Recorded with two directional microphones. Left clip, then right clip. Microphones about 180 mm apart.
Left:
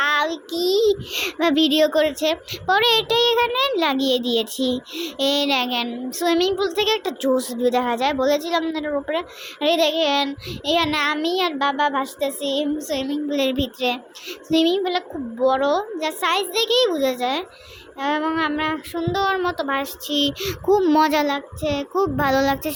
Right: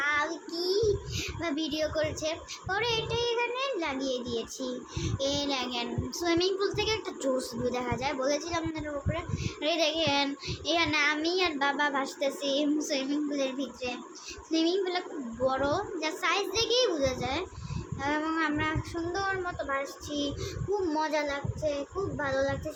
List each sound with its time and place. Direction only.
0.0 s child singing: 55° left (ahead or behind)
7.6 s a woman's voice: 45° left (ahead or behind)
13.3 s child singing: 50° left (ahead or behind)
15.4 s a woman's voice: 40° left (ahead or behind); by 22.7 s 60° left (ahead or behind)